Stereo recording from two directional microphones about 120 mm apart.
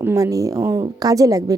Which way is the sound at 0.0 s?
25° right (ahead or behind).